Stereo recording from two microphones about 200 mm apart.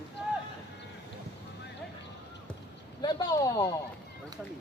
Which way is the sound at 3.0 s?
20° left (ahead or behind).